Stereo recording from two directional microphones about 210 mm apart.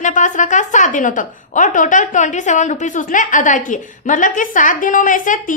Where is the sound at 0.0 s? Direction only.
35° left (ahead or behind).